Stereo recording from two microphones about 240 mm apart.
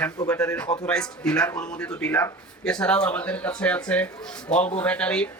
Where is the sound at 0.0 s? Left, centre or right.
Centre.